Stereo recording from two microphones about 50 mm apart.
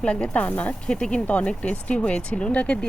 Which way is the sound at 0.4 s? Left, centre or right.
Left.